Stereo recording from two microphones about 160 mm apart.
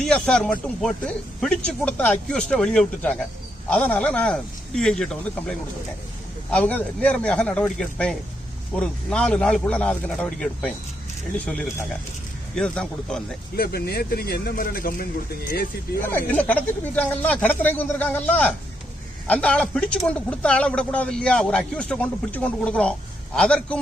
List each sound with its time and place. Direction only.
0.0 s speech: 5° left (ahead or behind)
13.6 s speech: 75° left (ahead or behind)
16.0 s speech: 10° left (ahead or behind)